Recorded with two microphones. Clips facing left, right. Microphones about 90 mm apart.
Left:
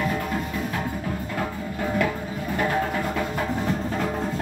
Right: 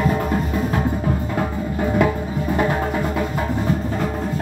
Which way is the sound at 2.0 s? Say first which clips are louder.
Right 6 dB; 20° right (ahead or behind).